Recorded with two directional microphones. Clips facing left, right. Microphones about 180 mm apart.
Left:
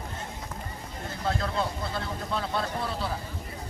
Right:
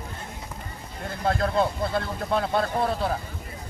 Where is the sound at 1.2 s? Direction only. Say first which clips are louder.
Right 6 dB; 55° right (ahead or behind).